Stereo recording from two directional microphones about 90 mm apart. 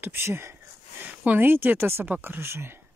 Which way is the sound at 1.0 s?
20° right (ahead or behind).